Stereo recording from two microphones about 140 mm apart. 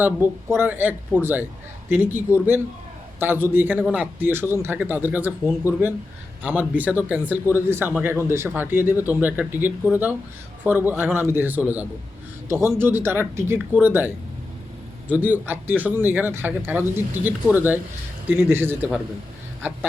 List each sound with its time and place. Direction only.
0.0 s speech: 15° right (ahead or behind)
15.1 s speech: 15° right (ahead or behind)